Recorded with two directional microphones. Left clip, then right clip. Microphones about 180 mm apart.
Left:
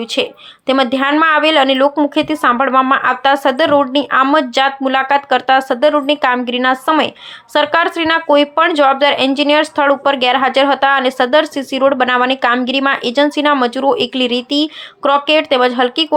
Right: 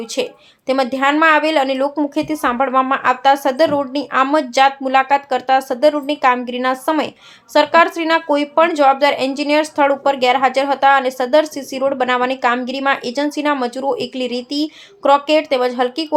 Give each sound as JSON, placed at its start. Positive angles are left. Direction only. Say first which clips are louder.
{"t": 0.0, "sound": "a woman's voice", "louder": "left 4 dB", "side_deg": 15}